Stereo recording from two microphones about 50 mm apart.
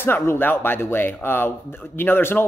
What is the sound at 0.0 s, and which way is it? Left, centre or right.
Speech, left.